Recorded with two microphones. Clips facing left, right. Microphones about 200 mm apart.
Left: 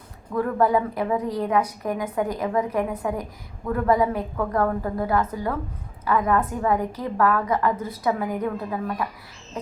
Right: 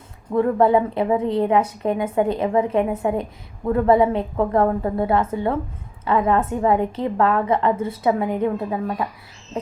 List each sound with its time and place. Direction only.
0.3 s a woman's voice: 25° right (ahead or behind)